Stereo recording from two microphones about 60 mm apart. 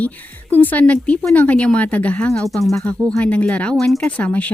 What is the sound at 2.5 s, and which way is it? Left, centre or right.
Speech, centre.